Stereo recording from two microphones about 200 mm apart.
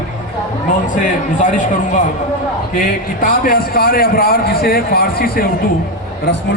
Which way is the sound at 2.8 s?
45° left (ahead or behind).